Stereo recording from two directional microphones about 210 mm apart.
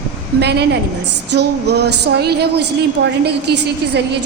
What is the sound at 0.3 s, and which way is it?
Speech, 50° right (ahead or behind).